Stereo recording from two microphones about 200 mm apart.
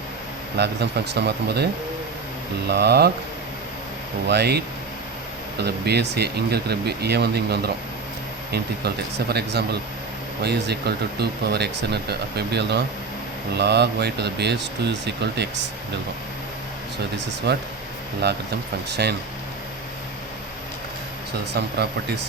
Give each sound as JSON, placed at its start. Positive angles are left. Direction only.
{"t": 0.6, "sound": "speech", "side_deg": -55}
{"t": 2.6, "sound": "speech", "side_deg": -55}
{"t": 4.3, "sound": "speech", "side_deg": -55}
{"t": 5.6, "sound": "speech", "side_deg": -55}
{"t": 13.5, "sound": "speech", "side_deg": -55}
{"t": 17.5, "sound": "speech", "side_deg": -55}
{"t": 21.5, "sound": "speech", "side_deg": -55}